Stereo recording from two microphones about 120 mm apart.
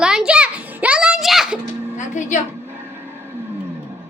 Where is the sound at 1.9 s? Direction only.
90° left.